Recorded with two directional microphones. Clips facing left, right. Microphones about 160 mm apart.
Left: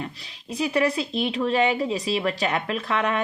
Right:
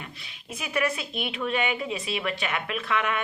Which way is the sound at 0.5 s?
30° left (ahead or behind).